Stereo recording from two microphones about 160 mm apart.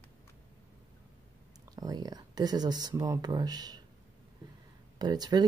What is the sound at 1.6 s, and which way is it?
Speech, 25° right (ahead or behind).